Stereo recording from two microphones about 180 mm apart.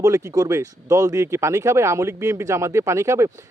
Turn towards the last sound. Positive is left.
turn(degrees=-15)  # may be behind; listen again after turning